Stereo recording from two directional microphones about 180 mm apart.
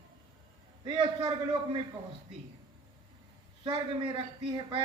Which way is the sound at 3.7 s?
25° right (ahead or behind).